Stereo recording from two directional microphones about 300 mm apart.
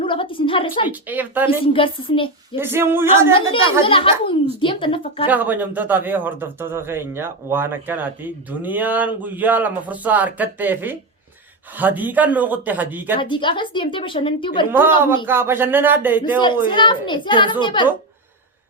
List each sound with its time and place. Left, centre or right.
0.0 s a woman's voice: centre
0.9 s a man's voice: centre
1.6 s a woman's voice: centre
2.6 s speech: centre
3.3 s a woman's voice: centre
5.3 s a man's voice: centre
13.1 s a woman's voice: centre
15.3 s speech: centre
16.6 s a woman's voice: centre